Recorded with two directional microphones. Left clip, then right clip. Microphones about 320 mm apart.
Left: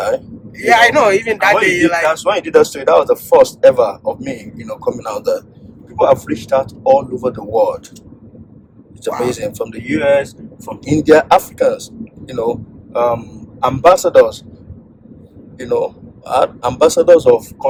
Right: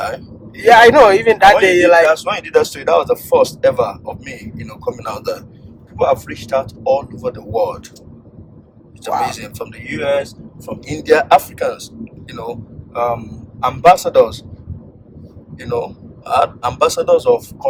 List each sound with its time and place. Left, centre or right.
0.9 s speech: centre
2.3 s speech: centre
9.2 s speech: centre
15.5 s speech: centre